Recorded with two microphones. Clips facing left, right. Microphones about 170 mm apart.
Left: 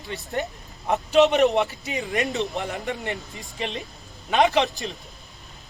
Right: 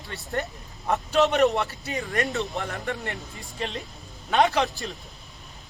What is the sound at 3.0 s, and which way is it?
A man's voice, centre (ahead or behind).